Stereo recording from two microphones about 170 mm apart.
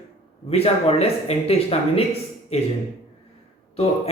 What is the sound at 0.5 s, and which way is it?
Speech, 35° left (ahead or behind).